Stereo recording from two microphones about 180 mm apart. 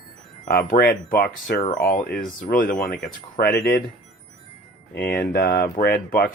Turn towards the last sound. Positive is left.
turn(degrees=60)  # may be behind; listen again after turning